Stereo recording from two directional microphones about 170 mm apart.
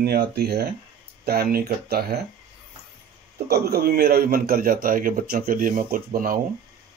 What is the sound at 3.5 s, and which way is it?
Speech, 65° right (ahead or behind).